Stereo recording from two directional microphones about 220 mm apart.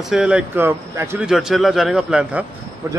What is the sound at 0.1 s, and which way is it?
A man's voice, 5° right (ahead or behind).